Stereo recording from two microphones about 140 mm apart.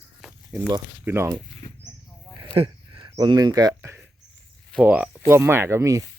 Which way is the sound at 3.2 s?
30° right (ahead or behind).